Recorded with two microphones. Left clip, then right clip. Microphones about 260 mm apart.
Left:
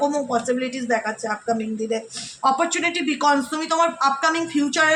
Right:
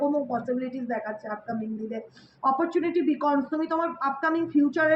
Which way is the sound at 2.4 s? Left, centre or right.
Left.